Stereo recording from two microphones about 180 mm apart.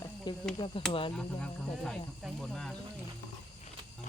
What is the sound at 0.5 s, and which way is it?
Speech, 30° left (ahead or behind).